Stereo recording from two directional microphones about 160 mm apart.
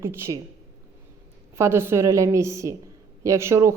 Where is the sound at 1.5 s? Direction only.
15° right (ahead or behind).